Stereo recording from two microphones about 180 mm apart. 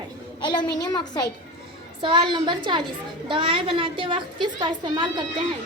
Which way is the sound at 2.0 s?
25° right (ahead or behind).